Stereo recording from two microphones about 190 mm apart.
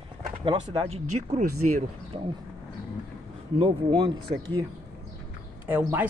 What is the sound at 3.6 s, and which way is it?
Speech, 25° right (ahead or behind).